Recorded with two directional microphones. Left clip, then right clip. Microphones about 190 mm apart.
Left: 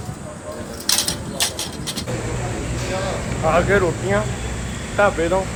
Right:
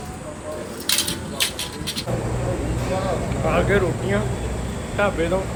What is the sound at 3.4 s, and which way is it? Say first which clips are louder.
Speech: left 4 dB; centre (ahead or behind).